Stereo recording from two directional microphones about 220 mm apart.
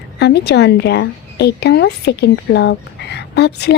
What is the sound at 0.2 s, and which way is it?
A woman's voice, 50° left (ahead or behind).